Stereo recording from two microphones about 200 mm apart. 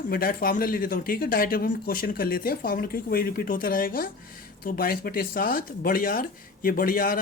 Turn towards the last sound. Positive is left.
turn(degrees=45)  # may be behind; listen again after turning